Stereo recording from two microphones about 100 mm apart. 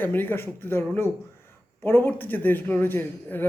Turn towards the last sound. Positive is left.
turn(degrees=20)  # may be behind; listen again after turning